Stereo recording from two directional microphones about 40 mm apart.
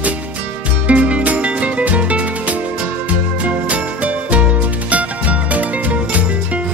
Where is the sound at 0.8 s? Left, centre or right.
Right.